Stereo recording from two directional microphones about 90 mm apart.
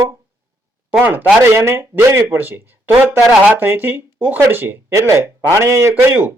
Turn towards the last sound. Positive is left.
turn(degrees=-20)  # may be behind; listen again after turning